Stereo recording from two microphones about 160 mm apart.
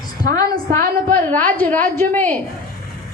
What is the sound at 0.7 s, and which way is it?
Speech, 55° right (ahead or behind).